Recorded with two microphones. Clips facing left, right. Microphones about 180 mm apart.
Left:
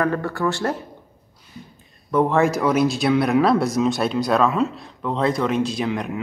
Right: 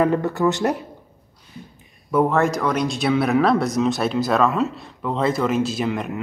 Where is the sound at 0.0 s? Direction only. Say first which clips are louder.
Right 3 dB; 20° right (ahead or behind).